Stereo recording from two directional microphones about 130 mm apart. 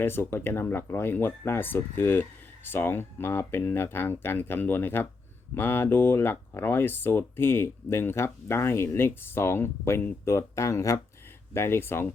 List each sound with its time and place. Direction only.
0.0 s speech: 20° left (ahead or behind)